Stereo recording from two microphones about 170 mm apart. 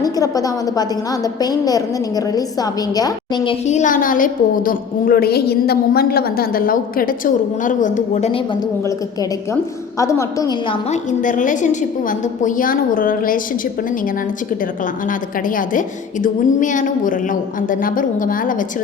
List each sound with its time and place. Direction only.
0.0 s a woman's voice: 20° left (ahead or behind)
3.7 s a woman's voice: 45° left (ahead or behind)
10.0 s a woman's voice: 20° left (ahead or behind)
10.8 s a woman's voice: 45° left (ahead or behind)
15.0 s a woman's voice: 55° left (ahead or behind)